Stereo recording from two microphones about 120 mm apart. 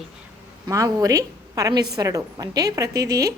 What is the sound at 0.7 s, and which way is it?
A woman's voice, 25° right (ahead or behind).